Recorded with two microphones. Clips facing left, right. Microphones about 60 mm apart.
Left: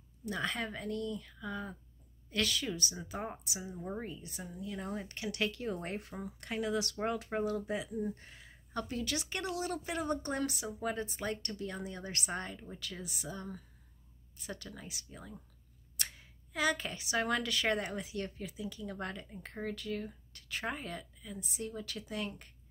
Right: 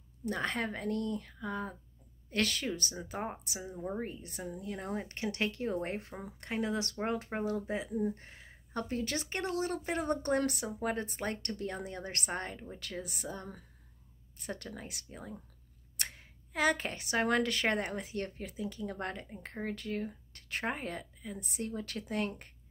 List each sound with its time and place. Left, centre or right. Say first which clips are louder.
0.2 s speech: right 2 dB; right
3.7 s speech: right 3 dB; centre
4.0 s speech: right 4 dB; right